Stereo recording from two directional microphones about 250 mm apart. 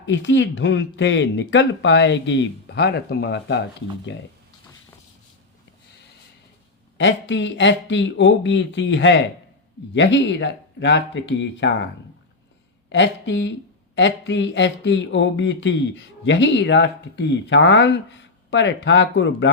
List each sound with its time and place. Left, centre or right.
0.0 s speech: left
6.9 s speech: left
12.9 s speech: left